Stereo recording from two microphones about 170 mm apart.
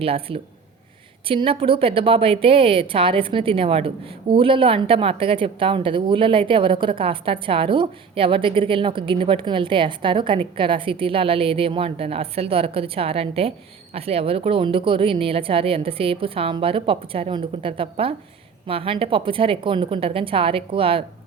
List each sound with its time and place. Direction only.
0.0 s a woman's voice: 35° right (ahead or behind)